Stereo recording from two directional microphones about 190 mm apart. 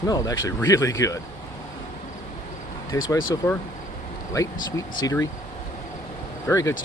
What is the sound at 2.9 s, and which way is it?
Speech, 20° left (ahead or behind).